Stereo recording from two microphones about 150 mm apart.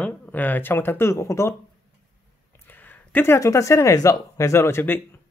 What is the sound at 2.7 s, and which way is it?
Speech, 10° left (ahead or behind).